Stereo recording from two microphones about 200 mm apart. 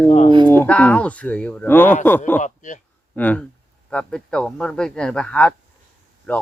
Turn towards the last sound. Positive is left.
turn(degrees=10)  # may be behind; listen again after turning